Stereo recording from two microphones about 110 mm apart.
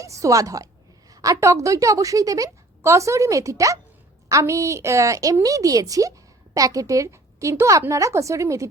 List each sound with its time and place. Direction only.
0.0 s a woman's voice: 30° right (ahead or behind)